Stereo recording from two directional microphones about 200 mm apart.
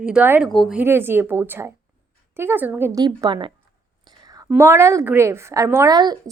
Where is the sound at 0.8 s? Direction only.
10° right (ahead or behind).